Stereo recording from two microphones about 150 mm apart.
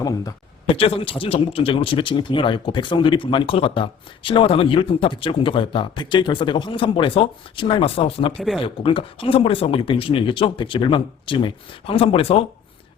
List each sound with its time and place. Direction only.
0.7 s speech: 40° left (ahead or behind)
8.4 s speech: centre (ahead or behind)
8.6 s speech: 35° left (ahead or behind)